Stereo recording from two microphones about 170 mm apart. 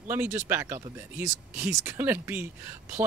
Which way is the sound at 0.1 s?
15° right (ahead or behind).